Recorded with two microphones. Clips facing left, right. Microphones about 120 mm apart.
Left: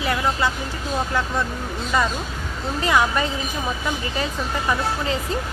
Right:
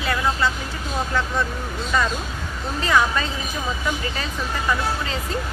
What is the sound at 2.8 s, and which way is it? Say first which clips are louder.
Speech: even; 20° left (ahead or behind).